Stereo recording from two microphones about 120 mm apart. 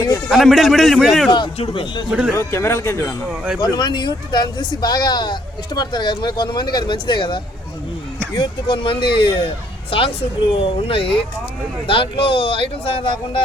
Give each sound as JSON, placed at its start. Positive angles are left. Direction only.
{"t": 0.3, "sound": "a man's voice", "side_deg": 0}
{"t": 1.5, "sound": "speech", "side_deg": 50}
{"t": 2.0, "sound": "speech", "side_deg": -10}
{"t": 2.3, "sound": "speech", "side_deg": 20}
{"t": 3.6, "sound": "speech", "side_deg": 35}